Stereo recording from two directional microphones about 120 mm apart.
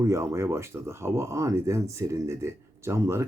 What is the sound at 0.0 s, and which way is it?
Speech, 25° right (ahead or behind).